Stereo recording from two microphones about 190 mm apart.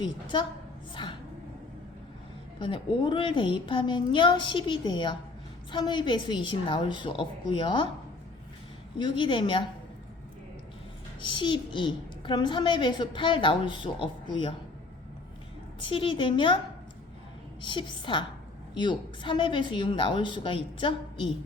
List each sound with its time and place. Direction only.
0.0 s a woman's voice: 25° left (ahead or behind)
1.0 s a sound: 25° left (ahead or behind)
2.6 s a woman's voice: 25° left (ahead or behind)
9.0 s a woman's voice: 25° left (ahead or behind)
11.2 s a woman's voice: 25° left (ahead or behind)
15.8 s a woman's voice: 25° left (ahead or behind)
17.6 s a woman's voice: 25° left (ahead or behind)